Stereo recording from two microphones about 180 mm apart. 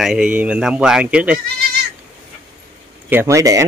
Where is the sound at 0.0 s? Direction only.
5° right (ahead or behind).